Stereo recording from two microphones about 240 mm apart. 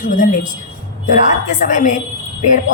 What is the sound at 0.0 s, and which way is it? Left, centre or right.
Speech, left.